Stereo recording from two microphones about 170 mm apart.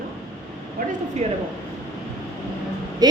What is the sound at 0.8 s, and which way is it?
Speech, 55° right (ahead or behind).